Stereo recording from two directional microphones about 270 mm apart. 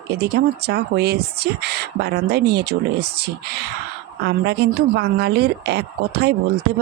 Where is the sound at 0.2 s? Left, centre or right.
Right.